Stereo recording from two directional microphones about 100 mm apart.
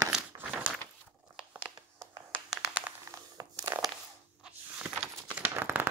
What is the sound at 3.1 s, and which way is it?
Crumpling, 40° right (ahead or behind).